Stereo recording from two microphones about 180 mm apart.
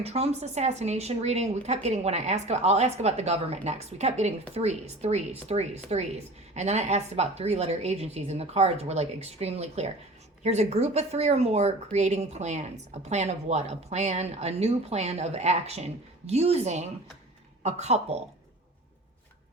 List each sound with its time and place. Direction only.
0.0 s speech: 35° right (ahead or behind)